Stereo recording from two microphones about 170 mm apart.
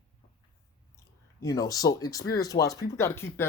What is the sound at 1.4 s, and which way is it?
Speech, 20° left (ahead or behind).